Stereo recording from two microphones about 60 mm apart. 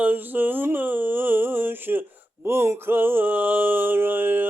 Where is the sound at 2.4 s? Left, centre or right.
Right.